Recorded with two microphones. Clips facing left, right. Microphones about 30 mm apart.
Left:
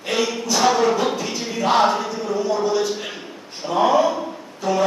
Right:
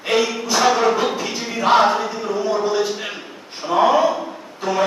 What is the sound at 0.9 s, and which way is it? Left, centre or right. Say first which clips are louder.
Speech: right 1 dB; centre.